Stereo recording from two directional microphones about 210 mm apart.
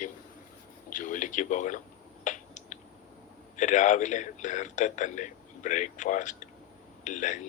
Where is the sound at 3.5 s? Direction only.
35° left (ahead or behind).